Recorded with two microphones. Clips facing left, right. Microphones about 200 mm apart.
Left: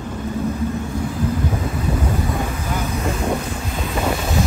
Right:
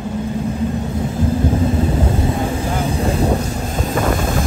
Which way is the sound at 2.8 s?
30° right (ahead or behind).